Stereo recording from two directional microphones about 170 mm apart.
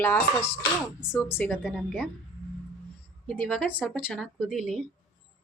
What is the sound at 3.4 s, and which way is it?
Speech, 5° left (ahead or behind).